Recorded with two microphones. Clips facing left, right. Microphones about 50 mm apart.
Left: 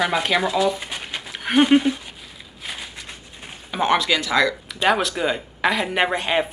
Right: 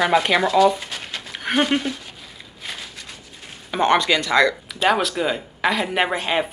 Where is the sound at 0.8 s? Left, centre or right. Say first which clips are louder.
Left 1 dB; centre.